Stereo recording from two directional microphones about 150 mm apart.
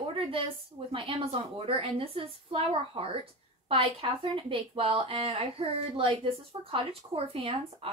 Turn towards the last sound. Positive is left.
turn(degrees=-40)  # may be behind; listen again after turning